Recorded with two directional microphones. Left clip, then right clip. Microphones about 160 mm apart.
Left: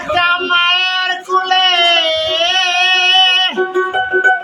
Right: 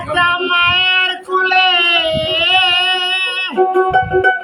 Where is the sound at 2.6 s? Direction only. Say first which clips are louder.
Left 2 dB; 20° right (ahead or behind).